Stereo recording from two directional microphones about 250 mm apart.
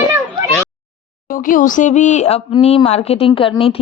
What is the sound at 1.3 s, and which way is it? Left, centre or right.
Speech, left.